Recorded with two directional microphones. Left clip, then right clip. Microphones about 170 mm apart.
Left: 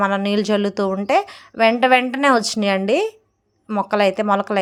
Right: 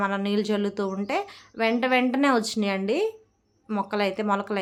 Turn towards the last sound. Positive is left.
turn(degrees=35)  # may be behind; listen again after turning